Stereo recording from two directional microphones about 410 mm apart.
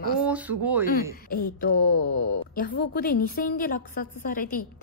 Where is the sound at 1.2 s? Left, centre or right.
Left.